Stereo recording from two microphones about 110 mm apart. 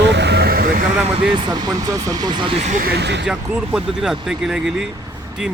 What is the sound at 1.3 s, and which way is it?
Speech, 45° right (ahead or behind).